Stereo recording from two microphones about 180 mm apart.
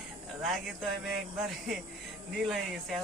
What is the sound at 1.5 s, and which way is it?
Speech, centre (ahead or behind).